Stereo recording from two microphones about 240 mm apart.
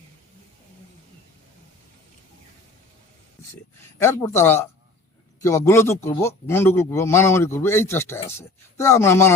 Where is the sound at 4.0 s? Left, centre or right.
Centre.